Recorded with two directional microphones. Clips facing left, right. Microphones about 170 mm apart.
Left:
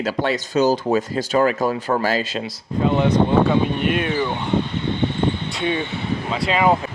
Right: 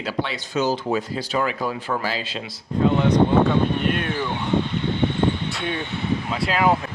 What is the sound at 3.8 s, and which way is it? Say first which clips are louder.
Speech: left 3 dB; 5° left (ahead or behind).